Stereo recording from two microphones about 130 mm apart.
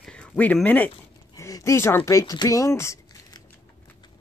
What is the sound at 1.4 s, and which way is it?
Speech, 25° left (ahead or behind).